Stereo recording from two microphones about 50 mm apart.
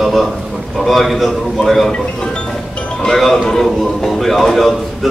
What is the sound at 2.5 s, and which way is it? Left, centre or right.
Music, centre.